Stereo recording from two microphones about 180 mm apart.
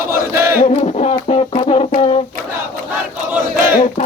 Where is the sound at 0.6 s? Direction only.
40° left (ahead or behind).